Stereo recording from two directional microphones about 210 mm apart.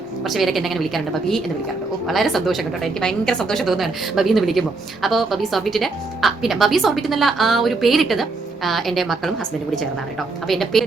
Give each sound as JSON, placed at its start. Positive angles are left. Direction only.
{"t": 0.3, "sound": "speech", "side_deg": 0}